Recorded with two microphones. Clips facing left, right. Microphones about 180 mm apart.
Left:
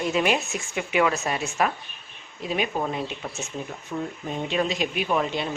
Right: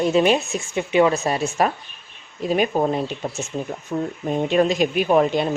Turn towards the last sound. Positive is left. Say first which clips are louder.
# right 8 dB
turn(degrees=-45)  # may be behind; listen again after turning